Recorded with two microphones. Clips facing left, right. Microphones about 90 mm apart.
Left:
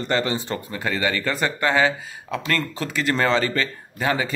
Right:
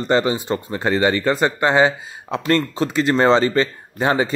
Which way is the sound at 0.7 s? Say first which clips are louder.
Right 6 dB; 30° right (ahead or behind).